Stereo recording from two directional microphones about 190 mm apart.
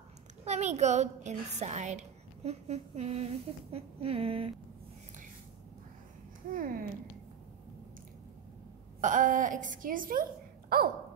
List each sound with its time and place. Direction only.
0.5 s a woman's voice: 35° right (ahead or behind)
3.7 s a sound: 30° right (ahead or behind)
6.5 s a woman's voice: 50° right (ahead or behind)
9.0 s a woman's voice: 45° right (ahead or behind)